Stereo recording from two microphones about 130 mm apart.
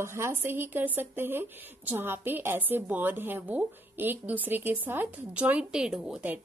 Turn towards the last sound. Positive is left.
turn(degrees=-10)  # may be behind; listen again after turning